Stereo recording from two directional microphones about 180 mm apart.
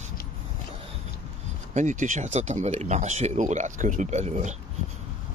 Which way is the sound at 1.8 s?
45° right (ahead or behind).